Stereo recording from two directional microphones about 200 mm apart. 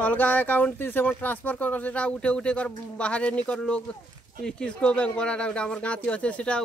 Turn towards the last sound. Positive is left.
turn(degrees=5)  # may be behind; listen again after turning